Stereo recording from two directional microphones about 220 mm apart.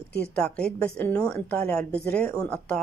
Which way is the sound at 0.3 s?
5° left (ahead or behind).